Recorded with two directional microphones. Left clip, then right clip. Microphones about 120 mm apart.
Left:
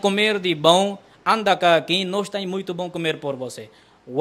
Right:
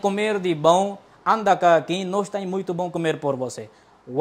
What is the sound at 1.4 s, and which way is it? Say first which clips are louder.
A man's voice: right 1 dB; centre (ahead or behind).